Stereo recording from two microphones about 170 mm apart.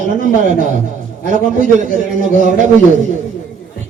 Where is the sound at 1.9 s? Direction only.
50° right (ahead or behind).